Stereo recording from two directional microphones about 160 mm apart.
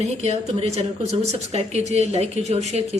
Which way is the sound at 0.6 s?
40° right (ahead or behind).